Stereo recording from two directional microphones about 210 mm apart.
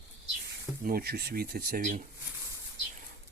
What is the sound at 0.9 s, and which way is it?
Speech, 45° right (ahead or behind).